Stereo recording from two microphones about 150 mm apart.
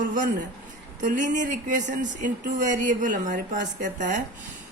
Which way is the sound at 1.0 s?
55° right (ahead or behind).